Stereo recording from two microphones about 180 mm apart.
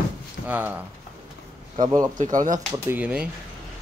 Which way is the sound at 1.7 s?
20° right (ahead or behind).